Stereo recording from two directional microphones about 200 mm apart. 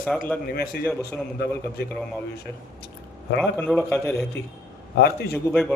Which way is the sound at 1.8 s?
55° left (ahead or behind).